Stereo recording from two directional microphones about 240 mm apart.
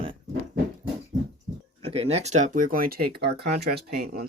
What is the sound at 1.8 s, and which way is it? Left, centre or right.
Speech, right.